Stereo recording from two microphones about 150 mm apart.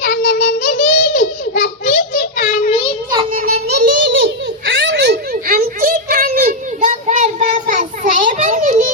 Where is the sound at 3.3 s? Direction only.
75° right (ahead or behind).